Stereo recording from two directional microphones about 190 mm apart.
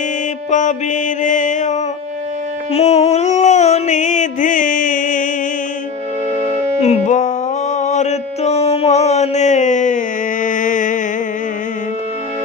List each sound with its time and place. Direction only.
0.5 s mantra: 40° left (ahead or behind)
2.7 s a sound: 35° left (ahead or behind)
6.8 s music: 35° left (ahead or behind)